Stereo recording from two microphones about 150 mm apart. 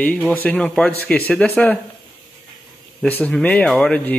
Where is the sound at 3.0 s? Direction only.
10° left (ahead or behind).